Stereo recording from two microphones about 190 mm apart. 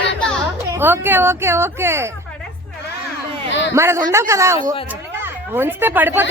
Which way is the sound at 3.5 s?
70° left (ahead or behind).